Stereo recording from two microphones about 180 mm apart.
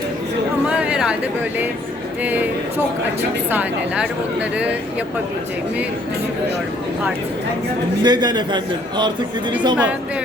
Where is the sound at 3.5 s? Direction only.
5° right (ahead or behind).